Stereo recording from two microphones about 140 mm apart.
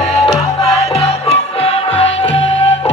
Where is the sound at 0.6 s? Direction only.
45° left (ahead or behind).